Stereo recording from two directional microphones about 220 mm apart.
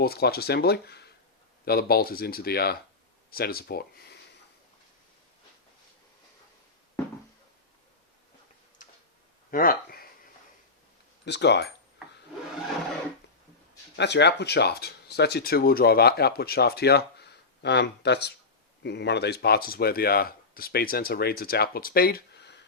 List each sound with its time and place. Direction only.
0.0 s speech: 45° left (ahead or behind)
9.5 s a sound: 40° left (ahead or behind)
11.3 s speech: 50° left (ahead or behind)
13.9 s speech: 50° left (ahead or behind)